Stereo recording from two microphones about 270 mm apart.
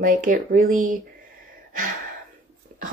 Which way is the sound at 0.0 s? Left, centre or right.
Right.